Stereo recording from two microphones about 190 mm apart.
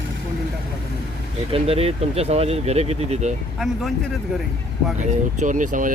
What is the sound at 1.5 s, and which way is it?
Speech, 30° right (ahead or behind).